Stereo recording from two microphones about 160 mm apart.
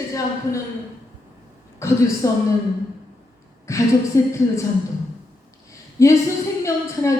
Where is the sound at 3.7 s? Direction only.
20° left (ahead or behind).